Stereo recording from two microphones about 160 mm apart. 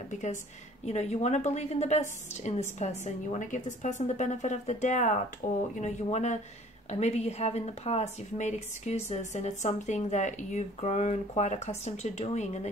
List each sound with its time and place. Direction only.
0.1 s speech: 50° left (ahead or behind)
6.0 s speech: 45° left (ahead or behind)